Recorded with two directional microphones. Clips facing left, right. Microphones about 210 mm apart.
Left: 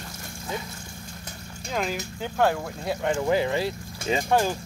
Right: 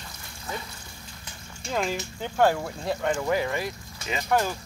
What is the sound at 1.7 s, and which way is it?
Speech, centre (ahead or behind).